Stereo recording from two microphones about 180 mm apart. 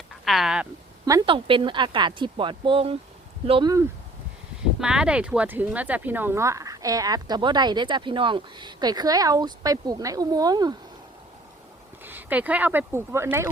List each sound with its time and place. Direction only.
0.3 s speech: centre (ahead or behind)
1.2 s speech: 30° right (ahead or behind)
4.8 s speech: 5° right (ahead or behind); by 10.8 s 20° right (ahead or behind)
12.0 s speech: 10° right (ahead or behind)